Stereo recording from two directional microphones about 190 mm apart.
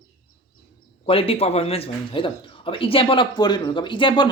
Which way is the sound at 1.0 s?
30° left (ahead or behind).